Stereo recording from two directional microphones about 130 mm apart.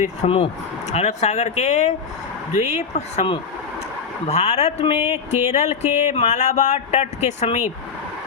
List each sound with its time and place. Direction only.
0.3 s speech: 45° left (ahead or behind)
4.3 s speech: 55° left (ahead or behind)
4.9 s music: 20° right (ahead or behind)
5.5 s speech: 55° left (ahead or behind)